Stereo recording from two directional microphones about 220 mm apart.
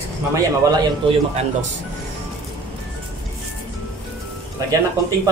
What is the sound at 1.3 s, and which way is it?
Speech, 30° right (ahead or behind).